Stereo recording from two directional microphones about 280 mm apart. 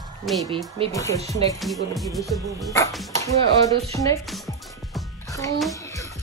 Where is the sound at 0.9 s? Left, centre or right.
Centre.